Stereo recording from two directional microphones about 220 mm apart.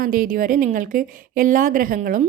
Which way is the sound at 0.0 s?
40° right (ahead or behind).